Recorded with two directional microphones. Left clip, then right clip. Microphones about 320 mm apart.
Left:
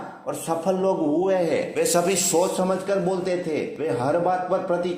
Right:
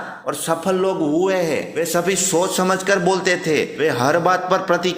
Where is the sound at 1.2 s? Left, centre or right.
Right.